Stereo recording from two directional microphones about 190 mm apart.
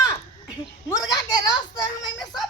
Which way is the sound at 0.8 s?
20° left (ahead or behind).